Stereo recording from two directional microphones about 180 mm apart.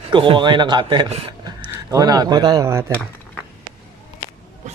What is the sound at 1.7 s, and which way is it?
Speech, 20° right (ahead or behind).